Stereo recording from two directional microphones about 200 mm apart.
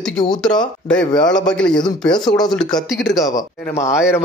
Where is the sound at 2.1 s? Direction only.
20° left (ahead or behind).